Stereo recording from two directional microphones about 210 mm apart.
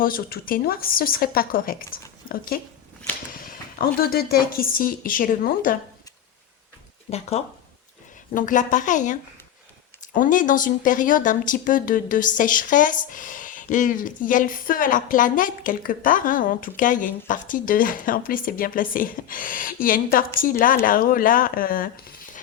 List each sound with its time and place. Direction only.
0.0 s speech: 45° left (ahead or behind)
7.1 s speech: 30° left (ahead or behind)
10.2 s speech: 40° left (ahead or behind)